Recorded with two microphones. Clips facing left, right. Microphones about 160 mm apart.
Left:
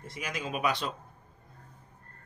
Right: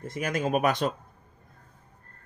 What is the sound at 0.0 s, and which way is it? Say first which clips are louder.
Speech: right 8 dB; 50° right (ahead or behind).